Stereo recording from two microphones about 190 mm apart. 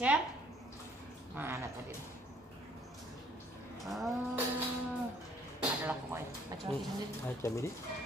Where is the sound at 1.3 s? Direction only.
10° right (ahead or behind).